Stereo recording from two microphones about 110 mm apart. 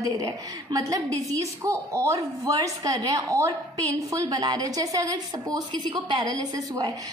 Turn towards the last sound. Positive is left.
turn(degrees=-35)  # may be behind; listen again after turning